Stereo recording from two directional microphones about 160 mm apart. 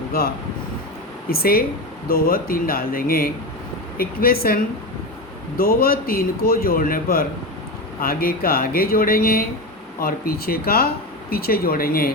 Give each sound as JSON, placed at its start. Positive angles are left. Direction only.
{"t": 1.3, "sound": "speech", "side_deg": 70}